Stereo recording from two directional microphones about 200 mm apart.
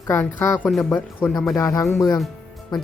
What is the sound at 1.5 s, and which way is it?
Speech, 15° left (ahead or behind).